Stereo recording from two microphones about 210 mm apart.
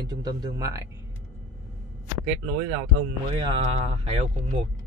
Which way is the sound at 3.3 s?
25° right (ahead or behind).